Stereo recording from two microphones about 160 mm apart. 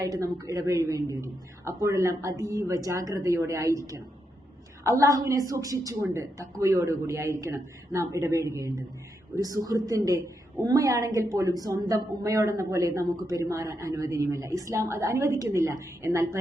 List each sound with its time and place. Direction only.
0.0 s a woman's voice: 20° right (ahead or behind)